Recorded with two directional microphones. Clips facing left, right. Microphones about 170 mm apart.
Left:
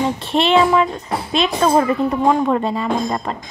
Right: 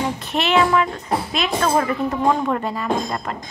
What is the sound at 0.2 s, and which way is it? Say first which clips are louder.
A woman's voice: left 3 dB; 30° left (ahead or behind).